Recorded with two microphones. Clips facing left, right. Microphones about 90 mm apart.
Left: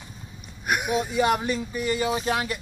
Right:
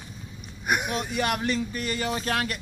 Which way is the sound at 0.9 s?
15° left (ahead or behind).